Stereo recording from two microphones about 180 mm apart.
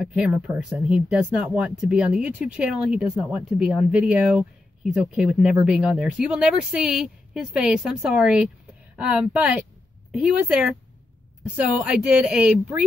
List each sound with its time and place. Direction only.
0.0 s speech: 5° right (ahead or behind)